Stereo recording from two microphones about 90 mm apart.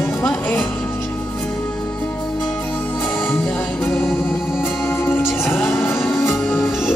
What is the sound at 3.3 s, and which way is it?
Music, 25° left (ahead or behind).